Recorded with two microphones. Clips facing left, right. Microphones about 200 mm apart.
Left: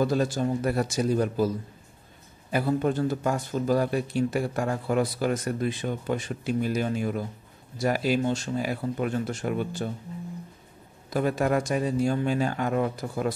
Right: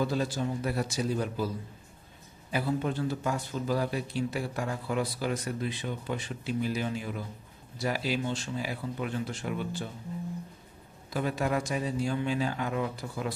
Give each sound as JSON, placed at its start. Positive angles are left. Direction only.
{"t": 0.0, "sound": "speech", "side_deg": 45}
{"t": 2.5, "sound": "speech", "side_deg": 50}
{"t": 11.1, "sound": "speech", "side_deg": 50}